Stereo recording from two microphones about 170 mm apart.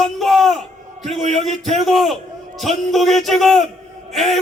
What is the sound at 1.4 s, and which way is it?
A man's voice, centre (ahead or behind).